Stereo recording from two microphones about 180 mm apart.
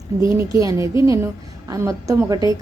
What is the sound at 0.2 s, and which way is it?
A woman's voice, 15° right (ahead or behind).